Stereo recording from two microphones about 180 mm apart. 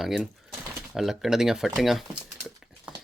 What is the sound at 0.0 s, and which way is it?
Speech, centre (ahead or behind).